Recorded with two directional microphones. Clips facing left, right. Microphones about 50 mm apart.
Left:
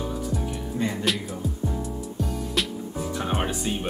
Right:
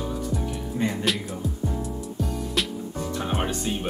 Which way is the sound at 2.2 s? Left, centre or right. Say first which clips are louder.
Even; centre.